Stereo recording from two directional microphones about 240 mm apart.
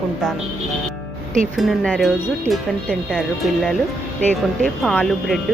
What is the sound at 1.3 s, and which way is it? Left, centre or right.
Speech, centre.